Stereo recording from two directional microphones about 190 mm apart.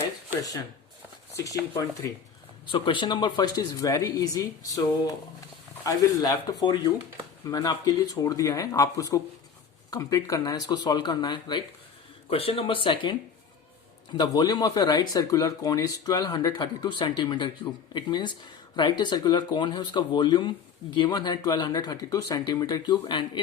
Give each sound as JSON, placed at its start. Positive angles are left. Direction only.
{"t": 1.3, "sound": "speech", "side_deg": 20}